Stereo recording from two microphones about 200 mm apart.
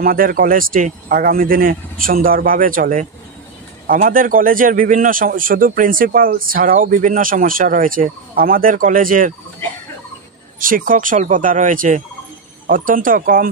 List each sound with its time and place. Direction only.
0.0 s a man's voice: 45° right (ahead or behind)
10.6 s a man's voice: 45° right (ahead or behind)